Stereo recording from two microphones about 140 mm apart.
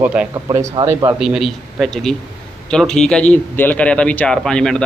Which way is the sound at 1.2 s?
Centre (ahead or behind).